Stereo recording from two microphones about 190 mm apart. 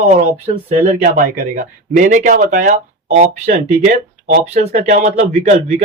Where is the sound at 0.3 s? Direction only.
30° right (ahead or behind).